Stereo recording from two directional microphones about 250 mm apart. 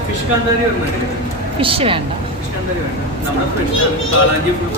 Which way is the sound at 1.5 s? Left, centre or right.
Right.